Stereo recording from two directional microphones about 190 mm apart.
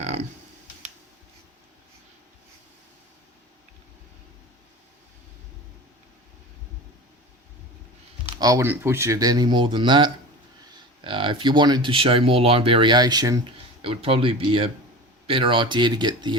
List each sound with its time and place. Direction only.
8.4 s speech: 15° right (ahead or behind)
13.8 s speech: 30° right (ahead or behind)